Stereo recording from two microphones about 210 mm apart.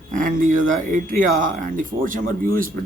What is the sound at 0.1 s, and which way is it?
Speech, 40° right (ahead or behind).